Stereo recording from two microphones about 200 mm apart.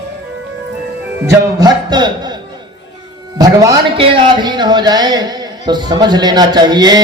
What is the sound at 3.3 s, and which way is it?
A man's voice, 20° right (ahead or behind).